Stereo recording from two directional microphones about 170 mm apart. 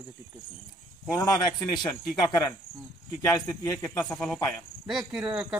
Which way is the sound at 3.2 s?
20° left (ahead or behind).